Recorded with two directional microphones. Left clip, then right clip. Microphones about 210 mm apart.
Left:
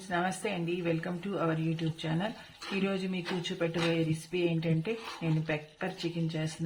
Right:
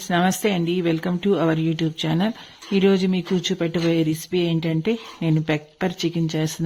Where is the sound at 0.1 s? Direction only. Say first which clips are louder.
Right 11 dB; 45° right (ahead or behind).